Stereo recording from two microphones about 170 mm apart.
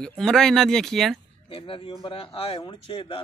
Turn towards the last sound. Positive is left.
turn(degrees=30)  # may be behind; listen again after turning